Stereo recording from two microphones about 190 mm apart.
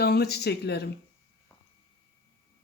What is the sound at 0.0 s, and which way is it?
Speech, 60° left (ahead or behind).